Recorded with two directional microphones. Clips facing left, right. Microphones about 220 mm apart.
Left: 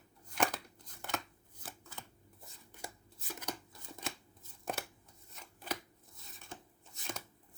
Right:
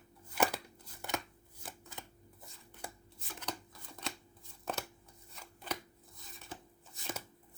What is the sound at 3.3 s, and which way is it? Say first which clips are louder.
Shuffling cards: right 2 dB; 10° left (ahead or behind).